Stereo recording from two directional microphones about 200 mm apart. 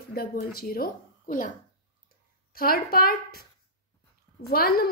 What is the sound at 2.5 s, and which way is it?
Speech, 50° left (ahead or behind).